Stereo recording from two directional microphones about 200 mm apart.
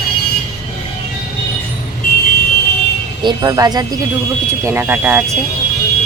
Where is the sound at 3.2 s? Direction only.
20° right (ahead or behind).